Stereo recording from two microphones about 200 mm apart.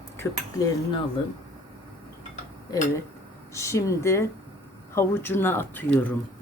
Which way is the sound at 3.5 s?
15° left (ahead or behind).